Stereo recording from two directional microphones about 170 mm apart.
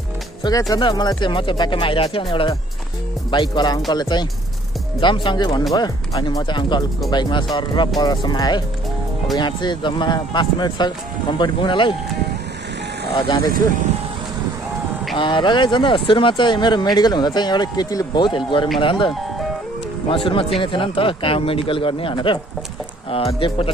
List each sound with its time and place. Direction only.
0.4 s speech: 20° left (ahead or behind)
3.3 s speech: 25° left (ahead or behind)
13.1 s speech: 25° left (ahead or behind)
15.1 s speech: 30° left (ahead or behind)